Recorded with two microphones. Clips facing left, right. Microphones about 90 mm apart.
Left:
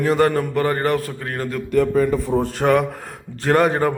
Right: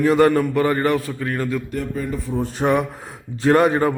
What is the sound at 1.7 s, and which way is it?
Speech, 90° left.